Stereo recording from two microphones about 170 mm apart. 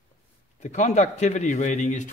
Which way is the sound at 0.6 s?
45° left (ahead or behind).